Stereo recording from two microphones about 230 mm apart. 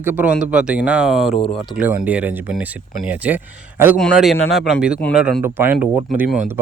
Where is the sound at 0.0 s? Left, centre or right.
Centre.